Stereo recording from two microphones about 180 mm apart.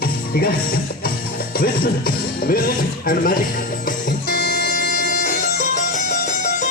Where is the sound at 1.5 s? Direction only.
55° left (ahead or behind).